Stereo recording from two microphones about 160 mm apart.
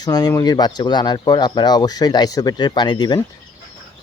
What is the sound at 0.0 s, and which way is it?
Speech, 25° left (ahead or behind).